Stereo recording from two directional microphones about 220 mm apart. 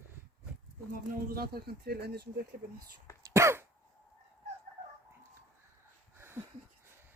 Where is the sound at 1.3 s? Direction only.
45° right (ahead or behind).